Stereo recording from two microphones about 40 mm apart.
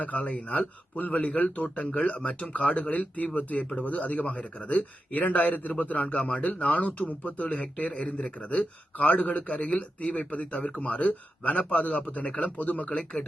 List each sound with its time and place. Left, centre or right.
0.0 s a man's voice: left
7.4 s a man's voice: left